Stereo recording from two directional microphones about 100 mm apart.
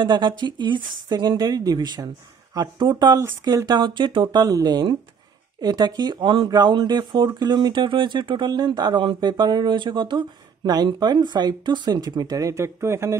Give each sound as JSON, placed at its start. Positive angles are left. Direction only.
{"t": 0.0, "sound": "speech", "side_deg": -50}